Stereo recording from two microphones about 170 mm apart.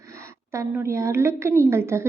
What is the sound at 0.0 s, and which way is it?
A woman's voice, 15° right (ahead or behind).